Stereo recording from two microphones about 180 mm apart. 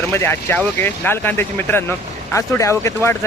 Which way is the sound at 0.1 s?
10° left (ahead or behind).